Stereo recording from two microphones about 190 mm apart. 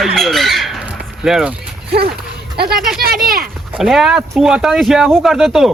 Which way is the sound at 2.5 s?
55° right (ahead or behind).